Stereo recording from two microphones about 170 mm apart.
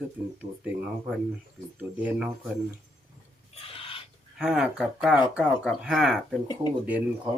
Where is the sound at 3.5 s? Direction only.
35° left (ahead or behind).